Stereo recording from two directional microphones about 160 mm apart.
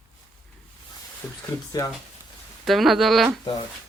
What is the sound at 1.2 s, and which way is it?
Speech, 5° left (ahead or behind).